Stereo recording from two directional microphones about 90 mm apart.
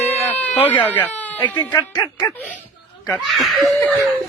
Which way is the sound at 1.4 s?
50° left (ahead or behind).